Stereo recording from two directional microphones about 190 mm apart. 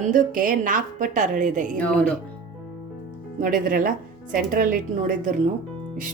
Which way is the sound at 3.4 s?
45° right (ahead or behind).